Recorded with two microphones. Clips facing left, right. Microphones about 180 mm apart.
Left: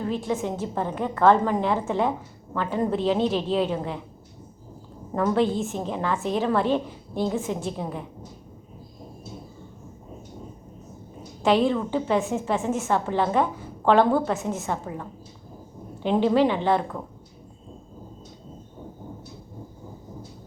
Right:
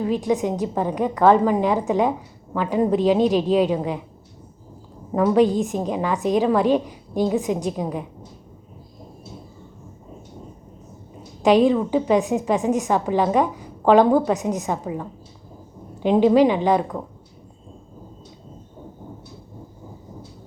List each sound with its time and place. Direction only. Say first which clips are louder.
0.0 s a woman's voice: right 5 dB; 15° right (ahead or behind)
5.1 s a woman's voice: right 5 dB; 10° right (ahead or behind)
11.4 s a woman's voice: right 5 dB; 15° right (ahead or behind)
16.0 s a woman's voice: right 5 dB; 15° right (ahead or behind)